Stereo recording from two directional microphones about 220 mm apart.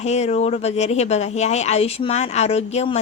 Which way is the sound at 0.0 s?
30° left (ahead or behind).